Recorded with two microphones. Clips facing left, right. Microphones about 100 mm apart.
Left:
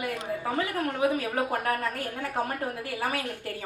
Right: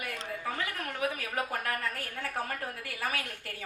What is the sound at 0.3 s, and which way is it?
A woman's voice, 20° left (ahead or behind).